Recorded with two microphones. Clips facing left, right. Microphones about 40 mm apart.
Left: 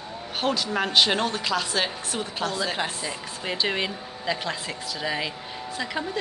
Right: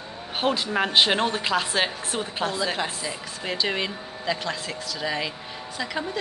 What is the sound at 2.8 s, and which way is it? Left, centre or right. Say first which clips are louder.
Speech: even; centre.